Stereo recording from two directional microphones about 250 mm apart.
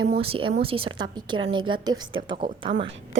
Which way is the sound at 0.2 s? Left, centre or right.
Right.